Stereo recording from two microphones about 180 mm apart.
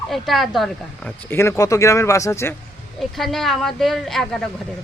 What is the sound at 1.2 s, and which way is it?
Speech, 15° left (ahead or behind).